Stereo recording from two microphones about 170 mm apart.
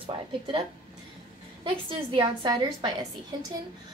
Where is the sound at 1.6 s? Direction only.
30° right (ahead or behind).